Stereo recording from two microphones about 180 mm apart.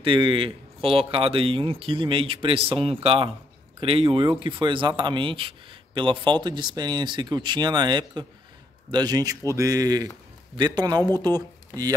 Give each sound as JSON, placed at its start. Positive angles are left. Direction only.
{"t": 0.0, "sound": "speech", "side_deg": -30}